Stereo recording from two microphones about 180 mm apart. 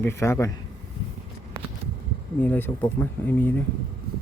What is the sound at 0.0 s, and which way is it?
Speech, 15° left (ahead or behind).